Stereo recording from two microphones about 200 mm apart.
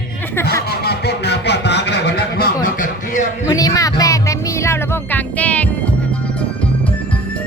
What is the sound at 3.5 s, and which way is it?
Music, 15° left (ahead or behind).